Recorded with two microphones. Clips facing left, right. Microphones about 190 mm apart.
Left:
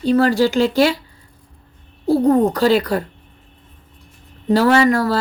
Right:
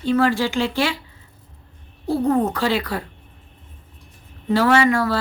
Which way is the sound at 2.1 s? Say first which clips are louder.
Left 5 dB; 40° left (ahead or behind).